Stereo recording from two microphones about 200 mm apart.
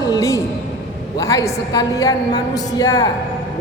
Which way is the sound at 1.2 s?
15° left (ahead or behind).